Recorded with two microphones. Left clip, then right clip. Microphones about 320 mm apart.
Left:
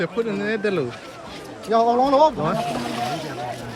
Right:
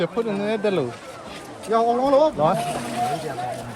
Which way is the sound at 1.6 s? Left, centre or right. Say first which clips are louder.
Left 2 dB; left.